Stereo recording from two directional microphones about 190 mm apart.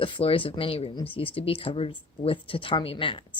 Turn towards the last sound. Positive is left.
turn(degrees=25)  # may be behind; listen again after turning